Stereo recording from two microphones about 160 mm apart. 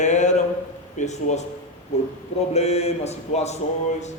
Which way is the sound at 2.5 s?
40° left (ahead or behind).